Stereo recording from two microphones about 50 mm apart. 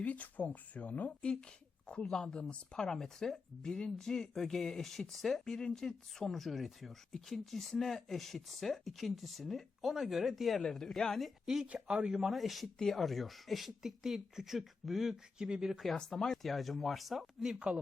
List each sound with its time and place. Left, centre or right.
0.0 s speech: left
1.9 s speech: centre
11.4 s speech: centre
11.7 s speech: right
12.0 s speech: centre
16.0 s speech: centre